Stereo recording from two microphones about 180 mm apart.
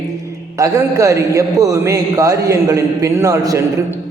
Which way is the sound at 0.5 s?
20° right (ahead or behind).